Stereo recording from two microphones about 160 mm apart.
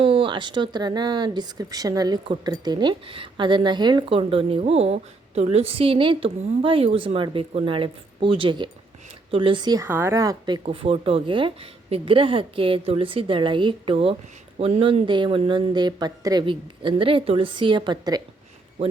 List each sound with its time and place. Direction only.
0.0 s speech: 35° right (ahead or behind)
9.8 s speech: 15° right (ahead or behind)